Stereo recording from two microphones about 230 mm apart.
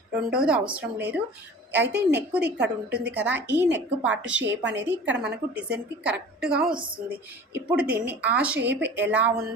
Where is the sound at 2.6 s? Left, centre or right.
Right.